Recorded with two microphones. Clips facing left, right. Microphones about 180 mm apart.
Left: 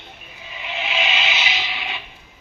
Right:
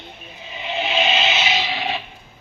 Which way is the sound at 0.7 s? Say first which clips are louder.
Right 5 dB; 30° right (ahead or behind).